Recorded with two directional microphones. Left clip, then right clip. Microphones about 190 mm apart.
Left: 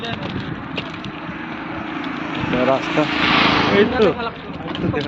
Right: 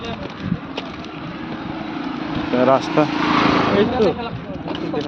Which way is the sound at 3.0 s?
20° right (ahead or behind).